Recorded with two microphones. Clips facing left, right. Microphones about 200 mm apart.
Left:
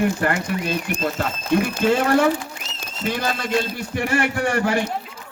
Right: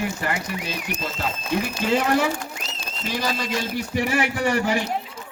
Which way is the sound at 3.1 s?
55° left (ahead or behind).